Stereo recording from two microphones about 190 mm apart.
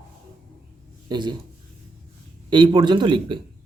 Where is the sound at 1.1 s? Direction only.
25° right (ahead or behind).